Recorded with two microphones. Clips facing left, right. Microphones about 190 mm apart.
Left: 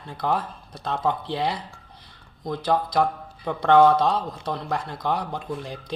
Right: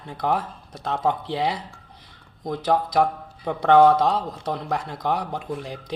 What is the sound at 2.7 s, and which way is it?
Speech, 10° right (ahead or behind).